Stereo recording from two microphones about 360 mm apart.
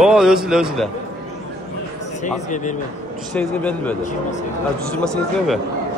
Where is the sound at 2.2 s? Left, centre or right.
Centre.